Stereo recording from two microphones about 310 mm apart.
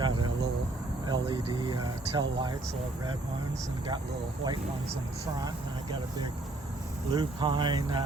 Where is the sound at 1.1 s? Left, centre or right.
Centre.